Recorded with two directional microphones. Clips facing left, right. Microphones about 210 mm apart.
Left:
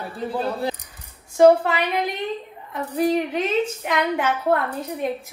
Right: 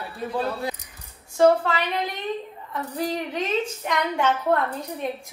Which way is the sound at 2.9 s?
20° left (ahead or behind).